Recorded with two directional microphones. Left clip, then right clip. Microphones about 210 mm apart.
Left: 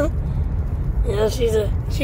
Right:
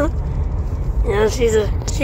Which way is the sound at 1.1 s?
5° left (ahead or behind).